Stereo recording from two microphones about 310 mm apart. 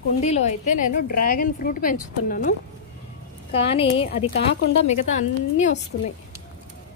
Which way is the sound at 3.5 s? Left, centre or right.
Centre.